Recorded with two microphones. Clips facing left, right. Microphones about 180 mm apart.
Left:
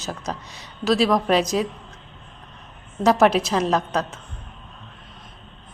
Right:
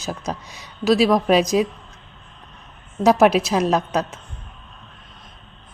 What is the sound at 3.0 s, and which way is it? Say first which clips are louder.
Speech: right 2 dB; 10° right (ahead or behind).